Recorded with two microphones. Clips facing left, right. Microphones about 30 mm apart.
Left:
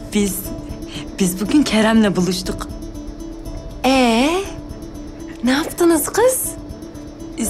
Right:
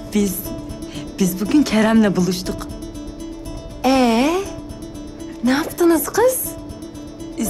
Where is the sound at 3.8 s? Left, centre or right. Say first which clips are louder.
Left 1 dB; left.